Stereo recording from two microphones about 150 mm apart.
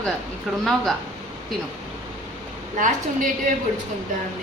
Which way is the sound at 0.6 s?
Centre (ahead or behind).